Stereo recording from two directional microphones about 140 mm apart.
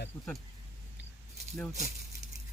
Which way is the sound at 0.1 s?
15° left (ahead or behind).